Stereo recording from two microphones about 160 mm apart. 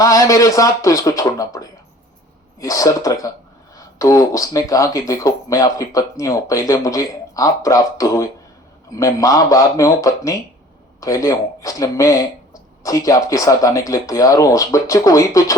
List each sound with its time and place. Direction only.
0.0 s speech: 20° left (ahead or behind)